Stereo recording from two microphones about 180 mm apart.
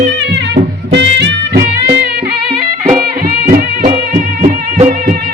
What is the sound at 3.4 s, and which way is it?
Music, 55° right (ahead or behind).